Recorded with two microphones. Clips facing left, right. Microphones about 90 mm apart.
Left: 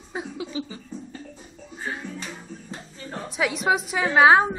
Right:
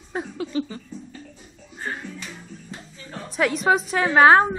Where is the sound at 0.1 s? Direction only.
10° left (ahead or behind).